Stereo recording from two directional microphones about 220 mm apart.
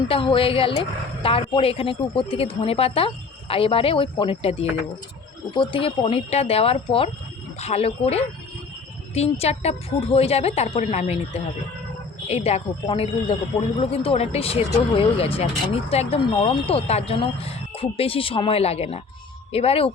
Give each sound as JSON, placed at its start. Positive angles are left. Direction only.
{"t": 0.1, "sound": "speech", "side_deg": 25}
{"t": 5.7, "sound": "speech", "side_deg": 25}